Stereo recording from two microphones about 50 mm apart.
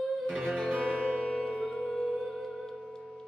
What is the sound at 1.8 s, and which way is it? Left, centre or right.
Singing bowl, centre.